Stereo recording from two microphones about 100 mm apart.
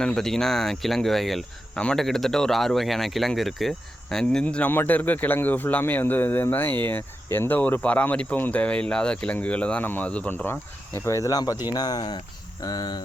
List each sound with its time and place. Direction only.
0.0 s speech: 5° left (ahead or behind); by 13.0 s 45° left (ahead or behind)